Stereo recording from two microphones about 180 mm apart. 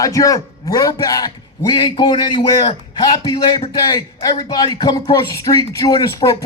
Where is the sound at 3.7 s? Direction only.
20° left (ahead or behind).